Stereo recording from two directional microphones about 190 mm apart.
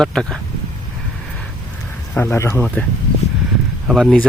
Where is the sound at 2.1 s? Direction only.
15° left (ahead or behind).